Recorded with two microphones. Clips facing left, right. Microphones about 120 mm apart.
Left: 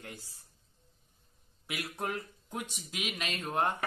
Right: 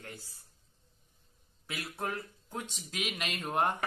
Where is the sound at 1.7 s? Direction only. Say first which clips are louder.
Left 1 dB; 15° left (ahead or behind).